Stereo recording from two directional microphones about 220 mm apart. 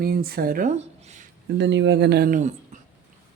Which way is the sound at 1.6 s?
55° right (ahead or behind).